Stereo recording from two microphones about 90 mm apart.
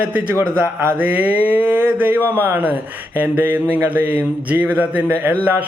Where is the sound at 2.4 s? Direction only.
20° right (ahead or behind).